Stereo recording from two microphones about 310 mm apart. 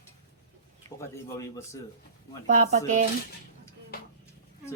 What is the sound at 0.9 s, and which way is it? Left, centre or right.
Speech, centre.